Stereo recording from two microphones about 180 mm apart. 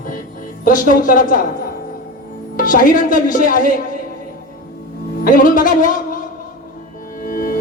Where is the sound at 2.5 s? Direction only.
50° left (ahead or behind).